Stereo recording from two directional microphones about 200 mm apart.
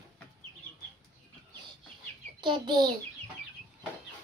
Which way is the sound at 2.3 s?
20° right (ahead or behind).